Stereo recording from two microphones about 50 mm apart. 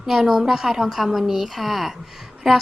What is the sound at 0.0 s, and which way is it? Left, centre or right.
A woman's voice, centre.